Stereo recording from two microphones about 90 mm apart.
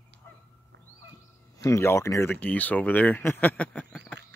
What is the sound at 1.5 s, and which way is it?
Speech, 30° left (ahead or behind).